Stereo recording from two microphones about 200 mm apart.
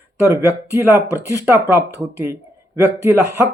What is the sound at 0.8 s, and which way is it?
Speech, 15° right (ahead or behind).